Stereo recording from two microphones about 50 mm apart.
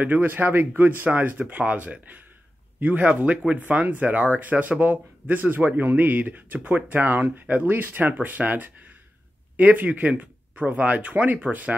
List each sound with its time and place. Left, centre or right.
0.0 s speech: right